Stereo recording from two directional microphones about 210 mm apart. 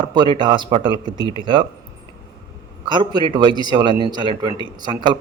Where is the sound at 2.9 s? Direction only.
20° right (ahead or behind).